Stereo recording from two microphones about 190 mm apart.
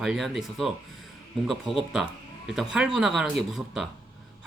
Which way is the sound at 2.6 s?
5° right (ahead or behind).